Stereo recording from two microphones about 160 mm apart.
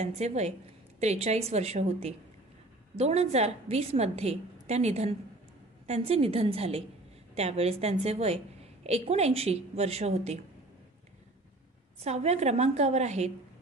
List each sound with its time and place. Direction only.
0.0 s a woman's voice: 45° right (ahead or behind)
12.0 s a woman's voice: 45° right (ahead or behind)